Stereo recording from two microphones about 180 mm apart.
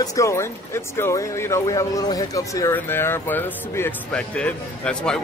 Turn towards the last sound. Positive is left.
turn(degrees=5)  # may be behind; listen again after turning